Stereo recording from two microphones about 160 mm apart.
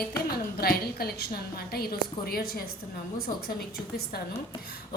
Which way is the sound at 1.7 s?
75° left (ahead or behind).